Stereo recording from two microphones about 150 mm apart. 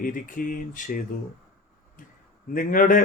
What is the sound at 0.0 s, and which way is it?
Speech, 65° left (ahead or behind).